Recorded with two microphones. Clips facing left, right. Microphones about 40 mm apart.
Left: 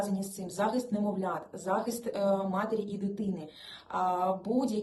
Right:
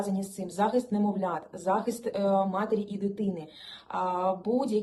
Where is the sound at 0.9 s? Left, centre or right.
Right.